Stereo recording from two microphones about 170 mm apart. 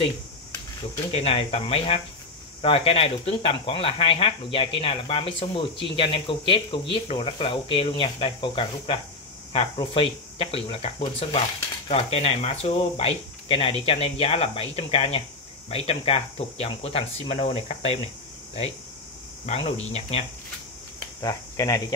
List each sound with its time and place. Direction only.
1.1 s speech: 35° left (ahead or behind)
19.4 s speech: 40° left (ahead or behind)
21.2 s speech: 20° left (ahead or behind)